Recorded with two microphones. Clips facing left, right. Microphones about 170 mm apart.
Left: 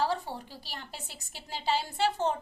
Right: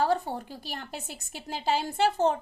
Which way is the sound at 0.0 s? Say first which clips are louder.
Right 4 dB; 50° right (ahead or behind).